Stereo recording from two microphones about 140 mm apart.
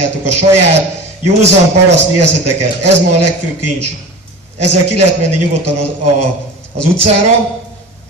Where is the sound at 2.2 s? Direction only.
55° right (ahead or behind).